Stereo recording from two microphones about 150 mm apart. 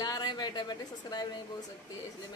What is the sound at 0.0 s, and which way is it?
A woman's voice, 25° left (ahead or behind).